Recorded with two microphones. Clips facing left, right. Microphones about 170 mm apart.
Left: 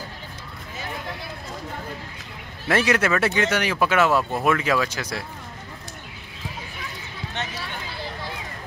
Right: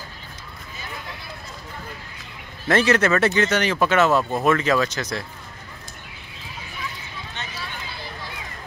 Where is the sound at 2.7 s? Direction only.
10° left (ahead or behind).